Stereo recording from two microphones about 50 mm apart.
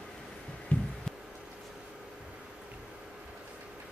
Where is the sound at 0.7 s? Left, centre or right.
Left.